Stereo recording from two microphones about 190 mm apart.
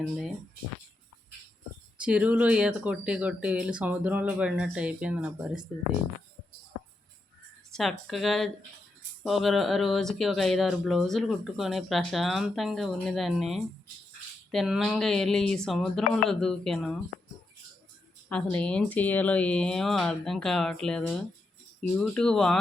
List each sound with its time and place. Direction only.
2.0 s speech: 5° right (ahead or behind)
7.7 s speech: centre (ahead or behind)
18.5 s speech: 5° left (ahead or behind)